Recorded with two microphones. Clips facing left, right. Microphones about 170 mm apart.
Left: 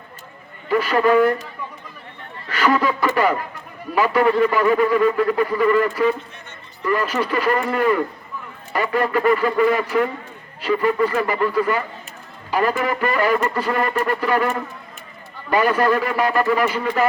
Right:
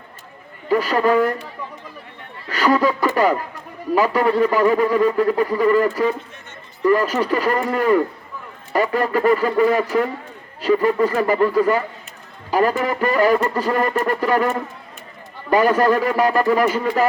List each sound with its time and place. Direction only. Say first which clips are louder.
0.7 s a man's voice: even; 40° right (ahead or behind)
2.5 s a man's voice: right 2 dB; 40° right (ahead or behind)